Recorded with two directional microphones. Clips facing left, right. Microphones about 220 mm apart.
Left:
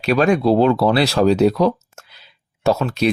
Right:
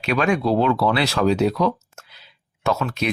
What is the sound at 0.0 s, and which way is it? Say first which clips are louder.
Speech: left 5 dB; 35° left (ahead or behind).